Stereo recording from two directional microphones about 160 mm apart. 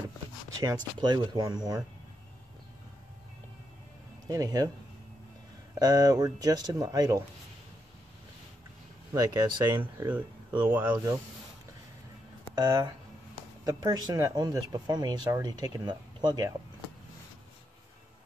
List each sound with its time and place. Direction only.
1.0 s speech: 25° right (ahead or behind)
4.3 s speech: 25° right (ahead or behind)
5.8 s speech: 25° right (ahead or behind)
9.1 s speech: 25° right (ahead or behind)
9.8 s speech: 10° right (ahead or behind)
12.5 s speech: 25° right (ahead or behind)